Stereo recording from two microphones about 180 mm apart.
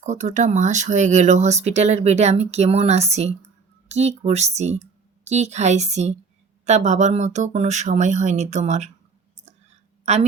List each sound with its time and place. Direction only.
0.0 s speech: 40° right (ahead or behind)
10.1 s speech: 40° right (ahead or behind)